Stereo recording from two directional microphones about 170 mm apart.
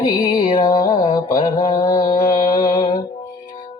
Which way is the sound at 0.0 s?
25° left (ahead or behind).